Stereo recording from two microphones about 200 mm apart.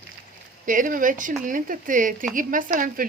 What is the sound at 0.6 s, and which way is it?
Speech, 40° right (ahead or behind).